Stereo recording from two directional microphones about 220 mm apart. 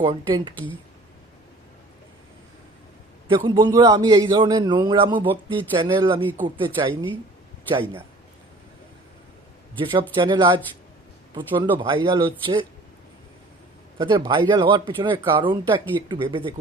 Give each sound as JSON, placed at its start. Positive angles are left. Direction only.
{"t": 0.0, "sound": "speech", "side_deg": -25}
{"t": 3.2, "sound": "speech", "side_deg": -20}
{"t": 9.7, "sound": "speech", "side_deg": -20}
{"t": 14.0, "sound": "speech", "side_deg": -20}